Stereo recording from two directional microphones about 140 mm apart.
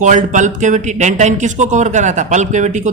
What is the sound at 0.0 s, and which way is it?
A man's voice, 65° right (ahead or behind).